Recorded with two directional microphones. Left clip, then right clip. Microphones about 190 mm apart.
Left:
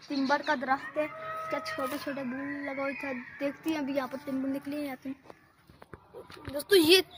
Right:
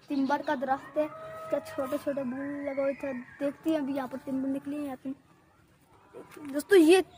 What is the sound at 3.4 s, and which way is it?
Speech, 60° right (ahead or behind).